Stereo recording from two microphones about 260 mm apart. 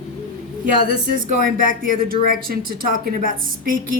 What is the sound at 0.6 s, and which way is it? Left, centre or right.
Speech, right.